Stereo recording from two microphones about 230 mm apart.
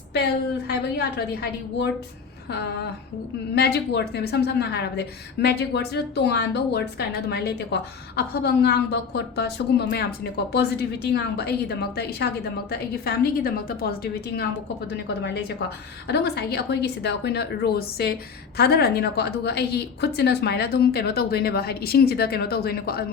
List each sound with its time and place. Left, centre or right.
0.9 s a woman's voice: left